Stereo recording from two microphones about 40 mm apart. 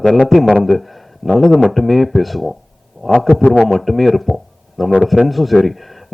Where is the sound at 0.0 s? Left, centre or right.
Centre.